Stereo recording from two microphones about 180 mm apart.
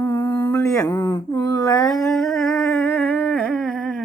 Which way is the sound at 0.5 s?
15° left (ahead or behind).